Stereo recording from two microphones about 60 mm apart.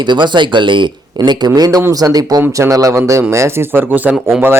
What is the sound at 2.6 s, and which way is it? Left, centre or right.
Speech, right.